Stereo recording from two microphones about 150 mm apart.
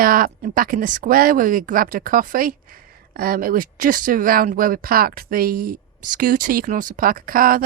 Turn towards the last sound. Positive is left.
turn(degrees=-70)  # may be behind; listen again after turning